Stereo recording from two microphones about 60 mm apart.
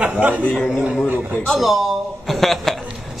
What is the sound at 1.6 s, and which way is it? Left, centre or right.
Speech, centre.